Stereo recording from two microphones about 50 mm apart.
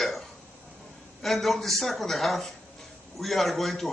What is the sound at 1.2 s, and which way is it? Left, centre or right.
A man's voice, centre.